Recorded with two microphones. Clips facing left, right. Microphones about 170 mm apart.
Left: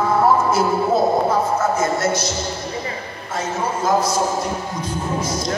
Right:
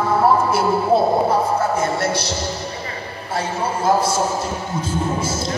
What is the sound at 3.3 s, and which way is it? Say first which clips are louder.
Speech: right 1 dB; 30° right (ahead or behind).